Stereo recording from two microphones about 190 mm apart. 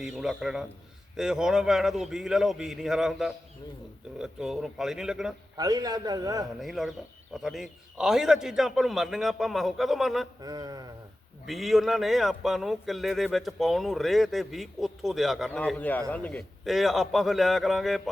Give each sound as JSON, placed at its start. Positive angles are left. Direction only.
{"t": 0.0, "sound": "speech", "side_deg": -5}
{"t": 5.5, "sound": "a man's voice", "side_deg": -20}
{"t": 6.6, "sound": "speech", "side_deg": 0}
{"t": 10.4, "sound": "a man's voice", "side_deg": -20}
{"t": 11.4, "sound": "speech", "side_deg": 0}